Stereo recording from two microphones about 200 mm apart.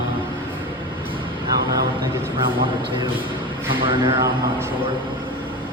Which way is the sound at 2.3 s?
25° right (ahead or behind).